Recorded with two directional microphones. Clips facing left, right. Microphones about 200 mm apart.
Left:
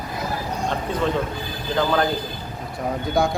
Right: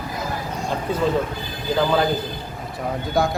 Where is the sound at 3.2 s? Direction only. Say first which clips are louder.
Even; centre (ahead or behind).